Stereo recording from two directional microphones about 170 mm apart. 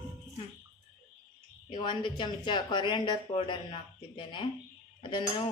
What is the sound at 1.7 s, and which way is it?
Speech, 30° left (ahead or behind).